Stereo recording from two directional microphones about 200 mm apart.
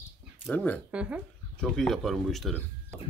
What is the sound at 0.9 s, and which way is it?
Speech, 5° right (ahead or behind).